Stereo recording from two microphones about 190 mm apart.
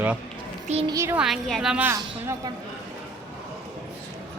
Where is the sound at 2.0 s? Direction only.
20° right (ahead or behind).